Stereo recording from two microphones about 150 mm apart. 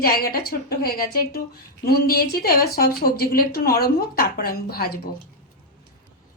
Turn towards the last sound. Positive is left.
turn(degrees=90)